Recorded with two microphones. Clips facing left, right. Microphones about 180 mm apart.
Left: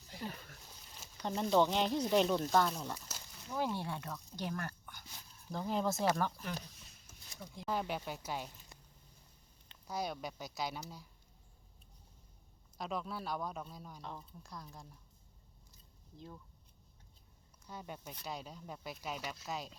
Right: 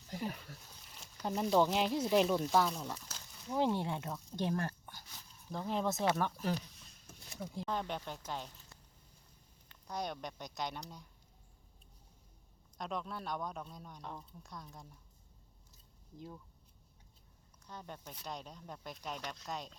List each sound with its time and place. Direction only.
0.1 s a sound: 45° right (ahead or behind)
0.9 s speech: 5° left (ahead or behind)
3.5 s speech: 20° right (ahead or behind)
5.5 s speech: centre (ahead or behind)
7.6 s speech: 5° left (ahead or behind)
9.8 s speech: 5° left (ahead or behind)
12.7 s speech: 5° left (ahead or behind)
16.1 s speech: 5° right (ahead or behind)
17.7 s speech: 10° left (ahead or behind)